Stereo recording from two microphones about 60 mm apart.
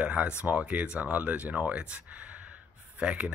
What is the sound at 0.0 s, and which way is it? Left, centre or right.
Speech, right.